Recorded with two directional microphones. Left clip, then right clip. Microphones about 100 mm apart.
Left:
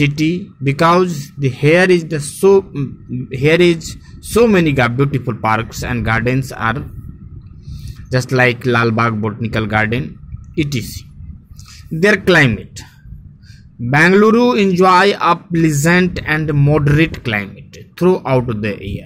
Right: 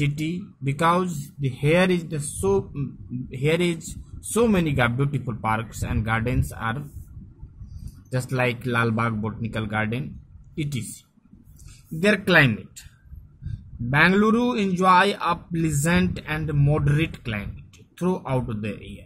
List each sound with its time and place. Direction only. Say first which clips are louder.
0.0 s a man's voice: left 12 dB; 20° left (ahead or behind)
8.1 s a man's voice: left 11 dB; 25° left (ahead or behind)
10.0 s a sound: left 9 dB; 25° left (ahead or behind)
12.0 s a man's voice: left 7 dB; 25° left (ahead or behind)
13.8 s a man's voice: left 9 dB; 25° left (ahead or behind)